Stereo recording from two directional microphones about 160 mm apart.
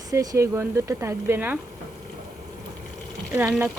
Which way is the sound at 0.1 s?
20° right (ahead or behind).